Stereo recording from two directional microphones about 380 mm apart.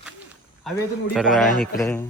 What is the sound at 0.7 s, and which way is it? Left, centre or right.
Speech, centre.